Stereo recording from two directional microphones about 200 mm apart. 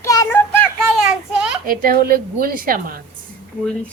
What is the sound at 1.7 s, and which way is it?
A woman's voice, 45° right (ahead or behind).